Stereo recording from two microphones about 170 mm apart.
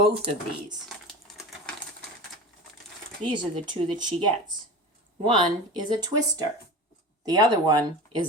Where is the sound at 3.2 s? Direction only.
25° right (ahead or behind).